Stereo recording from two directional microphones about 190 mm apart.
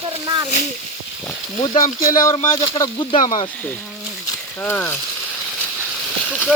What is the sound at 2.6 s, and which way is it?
Speech, 20° left (ahead or behind).